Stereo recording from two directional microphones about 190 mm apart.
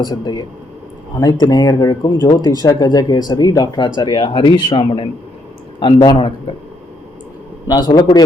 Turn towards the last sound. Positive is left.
turn(degrees=20)  # may be behind; listen again after turning